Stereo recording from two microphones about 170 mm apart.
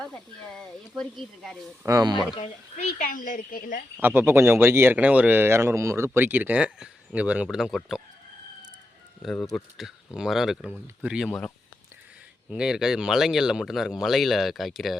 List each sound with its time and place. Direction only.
0.0 s speech: 5° left (ahead or behind)
1.8 s speech: 20° right (ahead or behind)
2.4 s speech: 45° left (ahead or behind)
3.9 s speech: 10° right (ahead or behind)
9.2 s speech: centre (ahead or behind)